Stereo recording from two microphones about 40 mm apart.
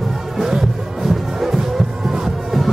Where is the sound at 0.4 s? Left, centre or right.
Centre.